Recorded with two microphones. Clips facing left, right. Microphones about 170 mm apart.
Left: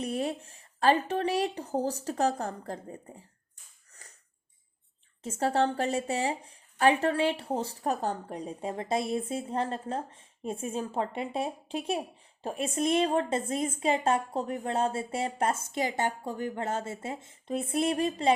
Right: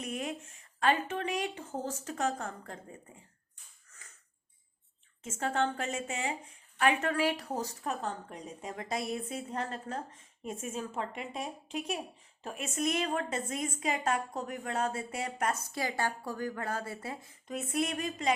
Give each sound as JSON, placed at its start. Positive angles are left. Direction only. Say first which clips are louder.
{"t": 0.0, "sound": "a woman's voice", "louder": "left 6 dB", "side_deg": 35}
{"t": 5.2, "sound": "a woman's voice", "louder": "left 5 dB", "side_deg": 35}